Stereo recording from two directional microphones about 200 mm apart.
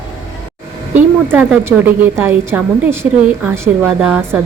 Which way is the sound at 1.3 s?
10° right (ahead or behind).